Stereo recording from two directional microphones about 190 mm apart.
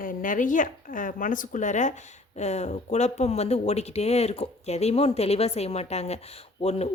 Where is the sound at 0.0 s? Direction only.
45° left (ahead or behind).